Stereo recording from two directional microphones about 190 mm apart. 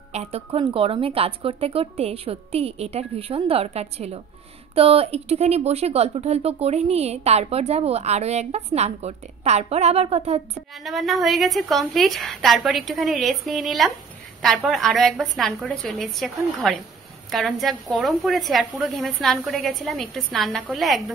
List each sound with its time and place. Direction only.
0.1 s speech: 35° right (ahead or behind)
10.8 s a woman's voice: centre (ahead or behind)